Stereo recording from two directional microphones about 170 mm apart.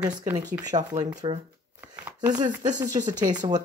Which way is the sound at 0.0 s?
25° right (ahead or behind).